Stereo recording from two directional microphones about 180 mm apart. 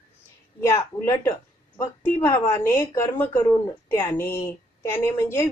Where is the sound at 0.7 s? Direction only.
15° left (ahead or behind).